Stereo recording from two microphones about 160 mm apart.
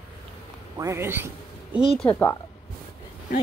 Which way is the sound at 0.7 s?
15° right (ahead or behind).